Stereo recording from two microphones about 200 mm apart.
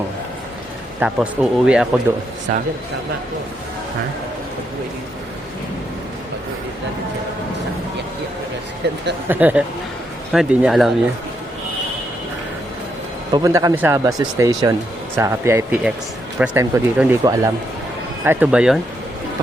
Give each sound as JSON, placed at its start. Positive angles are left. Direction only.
{"t": 0.9, "sound": "speech", "side_deg": -5}
{"t": 8.8, "sound": "speech", "side_deg": -55}
{"t": 9.3, "sound": "speech", "side_deg": -10}
{"t": 13.3, "sound": "speech", "side_deg": -15}